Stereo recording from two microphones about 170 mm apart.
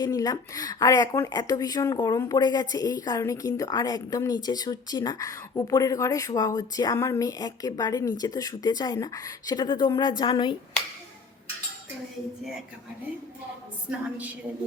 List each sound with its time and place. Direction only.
0.0 s speech: 20° left (ahead or behind)